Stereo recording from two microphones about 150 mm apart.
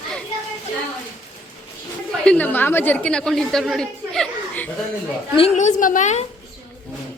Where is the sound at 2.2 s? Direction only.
10° left (ahead or behind).